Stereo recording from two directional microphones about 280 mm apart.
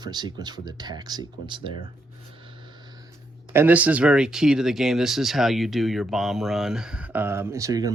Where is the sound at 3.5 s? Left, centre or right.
Centre.